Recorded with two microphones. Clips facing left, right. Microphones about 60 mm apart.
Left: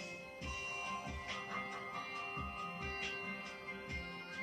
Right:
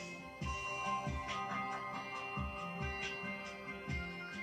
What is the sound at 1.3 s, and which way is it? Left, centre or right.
Music, centre.